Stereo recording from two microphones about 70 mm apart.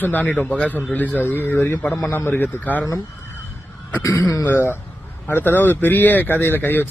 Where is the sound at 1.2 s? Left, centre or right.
Left.